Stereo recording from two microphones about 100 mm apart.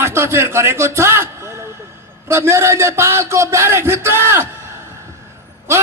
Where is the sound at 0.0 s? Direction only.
25° right (ahead or behind).